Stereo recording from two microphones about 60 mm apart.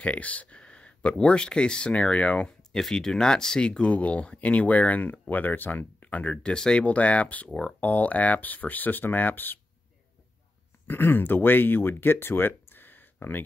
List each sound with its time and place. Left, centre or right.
0.0 s speech: left
2.4 s speech: centre
6.5 s speech: centre
6.8 s speech: left
10.9 s speech: left